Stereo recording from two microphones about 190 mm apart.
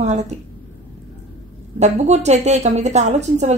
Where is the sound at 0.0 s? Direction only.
35° right (ahead or behind).